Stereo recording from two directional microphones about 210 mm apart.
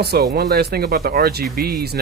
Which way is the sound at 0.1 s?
50° right (ahead or behind).